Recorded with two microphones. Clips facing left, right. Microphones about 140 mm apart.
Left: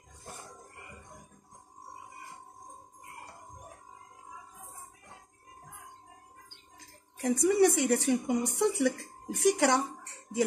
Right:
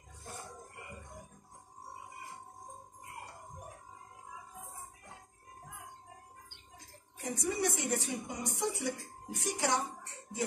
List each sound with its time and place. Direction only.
7.2 s a woman's voice: 70° left (ahead or behind)